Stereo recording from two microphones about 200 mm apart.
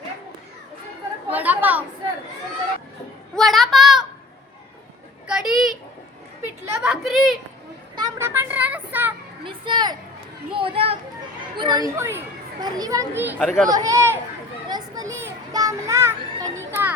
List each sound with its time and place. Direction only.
1.3 s speech: 10° right (ahead or behind)
3.3 s child singing: centre (ahead or behind)
5.3 s children playing: 5° right (ahead or behind)
6.8 s a sound: centre (ahead or behind)
7.9 s a sound: 15° right (ahead or behind)
9.4 s children playing: 25° right (ahead or behind)
10.5 s a sound: 25° right (ahead or behind)
11.5 s a child's voice: 20° right (ahead or behind); by 13.7 s centre (ahead or behind)
13.7 s a child's voice: 15° right (ahead or behind)
14.7 s children playing: 15° right (ahead or behind)